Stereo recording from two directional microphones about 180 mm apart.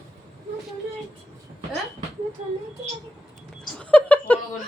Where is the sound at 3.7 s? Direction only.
5° left (ahead or behind).